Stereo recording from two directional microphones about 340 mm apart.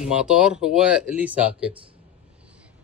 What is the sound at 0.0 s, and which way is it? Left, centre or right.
Speech, centre.